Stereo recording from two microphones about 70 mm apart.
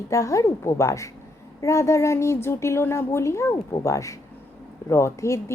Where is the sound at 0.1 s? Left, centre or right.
Left.